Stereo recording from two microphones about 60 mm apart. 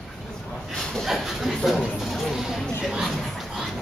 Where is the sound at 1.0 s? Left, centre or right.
Centre.